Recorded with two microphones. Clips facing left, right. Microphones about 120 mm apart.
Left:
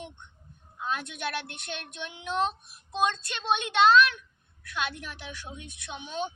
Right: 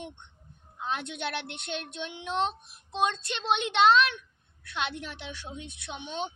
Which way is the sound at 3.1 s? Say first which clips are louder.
Right 3 dB; 25° right (ahead or behind).